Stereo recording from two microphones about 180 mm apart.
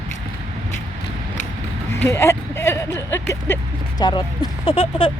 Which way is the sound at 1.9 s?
15° left (ahead or behind).